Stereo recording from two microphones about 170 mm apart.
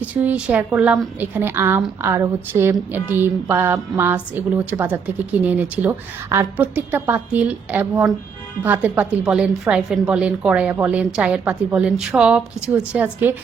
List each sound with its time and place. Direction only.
0.0 s speech: 10° right (ahead or behind)